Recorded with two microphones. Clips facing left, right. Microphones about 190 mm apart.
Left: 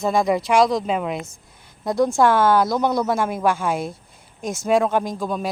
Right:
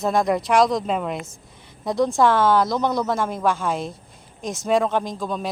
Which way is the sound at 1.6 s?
Centre (ahead or behind).